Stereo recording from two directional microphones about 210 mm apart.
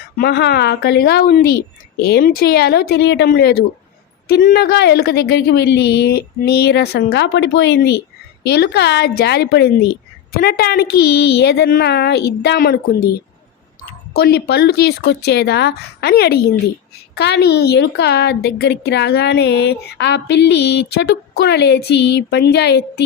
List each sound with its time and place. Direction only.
0.2 s a woman's voice: 50° left (ahead or behind)
14.2 s a woman's voice: 50° left (ahead or behind)